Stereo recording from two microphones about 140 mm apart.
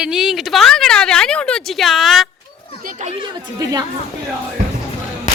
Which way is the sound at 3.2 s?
30° right (ahead or behind).